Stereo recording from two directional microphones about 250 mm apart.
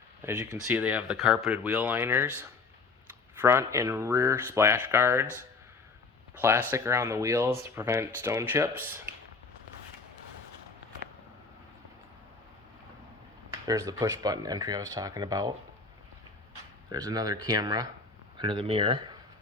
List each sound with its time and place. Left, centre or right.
0.2 s speech: centre
6.4 s speech: centre
13.5 s speech: centre
16.9 s speech: centre